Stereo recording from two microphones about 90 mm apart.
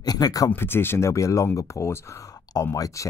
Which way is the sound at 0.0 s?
45° left (ahead or behind).